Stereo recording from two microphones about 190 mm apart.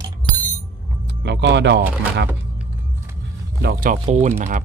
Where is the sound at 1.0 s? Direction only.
65° right (ahead or behind).